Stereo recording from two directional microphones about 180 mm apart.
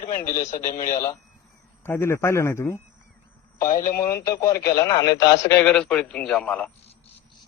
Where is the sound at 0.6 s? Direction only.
50° left (ahead or behind).